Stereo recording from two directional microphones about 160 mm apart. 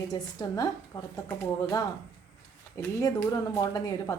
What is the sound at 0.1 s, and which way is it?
A woman's voice, 25° left (ahead or behind).